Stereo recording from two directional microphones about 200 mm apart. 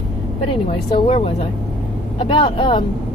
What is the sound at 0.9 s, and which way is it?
A woman's voice, 30° left (ahead or behind).